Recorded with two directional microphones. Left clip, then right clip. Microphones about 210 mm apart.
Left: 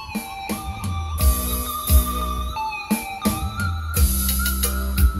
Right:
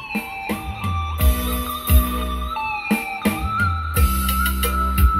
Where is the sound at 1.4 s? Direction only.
10° right (ahead or behind).